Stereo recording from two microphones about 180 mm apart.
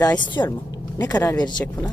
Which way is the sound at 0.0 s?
20° left (ahead or behind).